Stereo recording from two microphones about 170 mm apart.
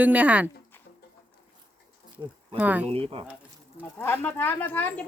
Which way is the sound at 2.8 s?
35° right (ahead or behind).